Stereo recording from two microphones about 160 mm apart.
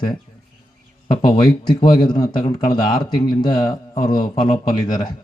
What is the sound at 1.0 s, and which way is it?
Speech, 30° left (ahead or behind).